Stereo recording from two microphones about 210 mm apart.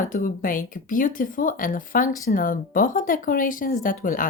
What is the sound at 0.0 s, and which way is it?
Speech, 40° left (ahead or behind).